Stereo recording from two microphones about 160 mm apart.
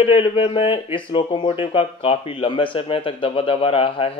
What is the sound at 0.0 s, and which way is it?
Speech, 35° left (ahead or behind).